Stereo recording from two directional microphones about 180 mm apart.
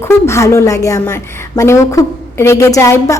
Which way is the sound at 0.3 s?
15° left (ahead or behind).